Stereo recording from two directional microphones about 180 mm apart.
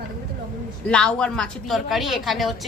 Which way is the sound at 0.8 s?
5° left (ahead or behind).